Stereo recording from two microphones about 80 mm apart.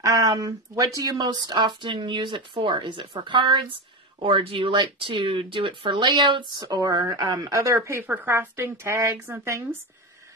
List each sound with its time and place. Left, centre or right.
0.0 s a sound: right
0.3 s speech: right
6.5 s a woman's voice: right
8.1 s a woman's voice: right